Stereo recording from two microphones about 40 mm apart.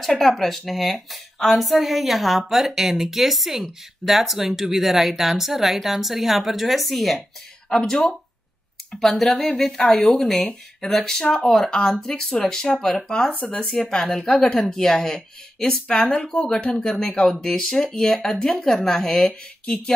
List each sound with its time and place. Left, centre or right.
0.0 s speech: centre
7.8 s speech: centre
9.2 s speech: centre